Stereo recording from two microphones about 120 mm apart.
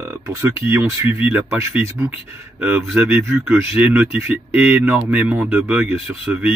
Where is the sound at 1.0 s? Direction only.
15° right (ahead or behind).